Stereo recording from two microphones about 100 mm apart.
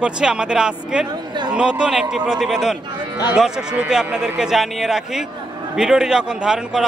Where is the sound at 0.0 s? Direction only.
10° right (ahead or behind).